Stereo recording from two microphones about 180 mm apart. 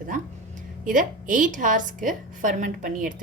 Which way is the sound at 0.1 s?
45° right (ahead or behind).